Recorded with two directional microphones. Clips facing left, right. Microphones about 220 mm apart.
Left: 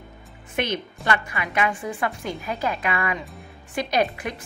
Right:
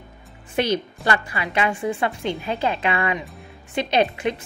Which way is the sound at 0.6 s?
35° right (ahead or behind).